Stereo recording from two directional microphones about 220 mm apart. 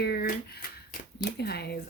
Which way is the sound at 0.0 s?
45° left (ahead or behind).